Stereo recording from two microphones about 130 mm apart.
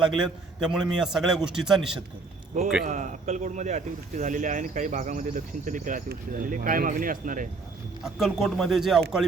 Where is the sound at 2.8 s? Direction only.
75° right (ahead or behind); by 7.4 s 90° right.